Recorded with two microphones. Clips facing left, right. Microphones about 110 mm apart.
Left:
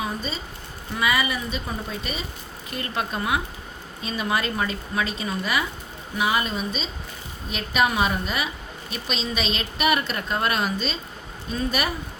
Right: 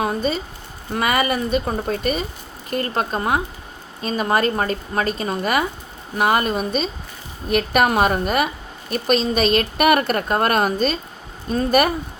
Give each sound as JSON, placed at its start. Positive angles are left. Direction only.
{"t": 0.0, "sound": "speech", "side_deg": -55}